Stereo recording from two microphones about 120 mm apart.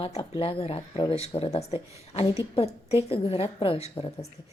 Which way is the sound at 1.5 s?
60° left (ahead or behind).